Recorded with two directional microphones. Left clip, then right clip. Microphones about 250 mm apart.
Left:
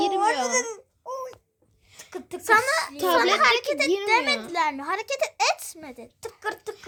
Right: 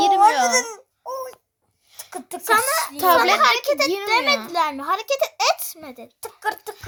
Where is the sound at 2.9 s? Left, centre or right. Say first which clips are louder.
Right 11 dB; right.